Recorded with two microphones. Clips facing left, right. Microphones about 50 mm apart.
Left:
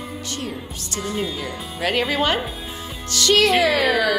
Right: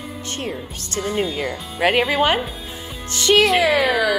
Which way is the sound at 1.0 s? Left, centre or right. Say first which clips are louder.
Right 4 dB; right.